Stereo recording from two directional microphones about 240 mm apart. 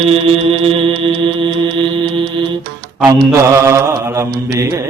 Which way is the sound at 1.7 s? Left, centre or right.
Right.